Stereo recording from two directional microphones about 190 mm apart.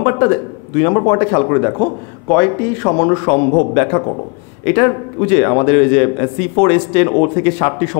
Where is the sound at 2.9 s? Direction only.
25° left (ahead or behind).